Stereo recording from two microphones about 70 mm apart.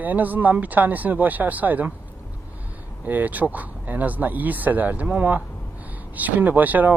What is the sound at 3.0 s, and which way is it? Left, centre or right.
Speech, right.